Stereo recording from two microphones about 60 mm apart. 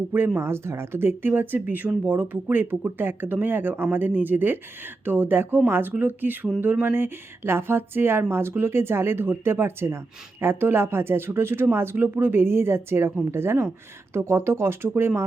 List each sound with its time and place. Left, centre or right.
0.3 s speech: right